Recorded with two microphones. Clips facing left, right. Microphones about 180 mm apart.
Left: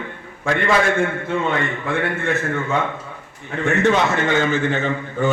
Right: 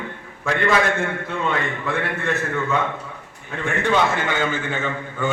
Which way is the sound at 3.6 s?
40° left (ahead or behind).